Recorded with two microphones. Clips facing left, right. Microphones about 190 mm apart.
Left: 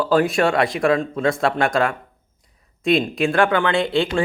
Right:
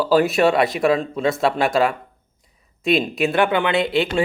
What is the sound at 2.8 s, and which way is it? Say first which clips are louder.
Speech: left 1 dB; 20° right (ahead or behind).